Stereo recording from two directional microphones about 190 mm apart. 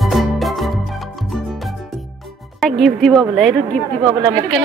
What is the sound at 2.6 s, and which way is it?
A woman's voice, centre (ahead or behind).